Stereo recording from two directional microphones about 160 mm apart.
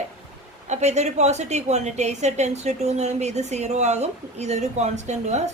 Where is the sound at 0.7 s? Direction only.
45° right (ahead or behind).